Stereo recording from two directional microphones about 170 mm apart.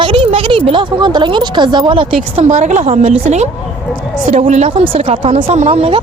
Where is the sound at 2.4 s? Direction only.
45° right (ahead or behind).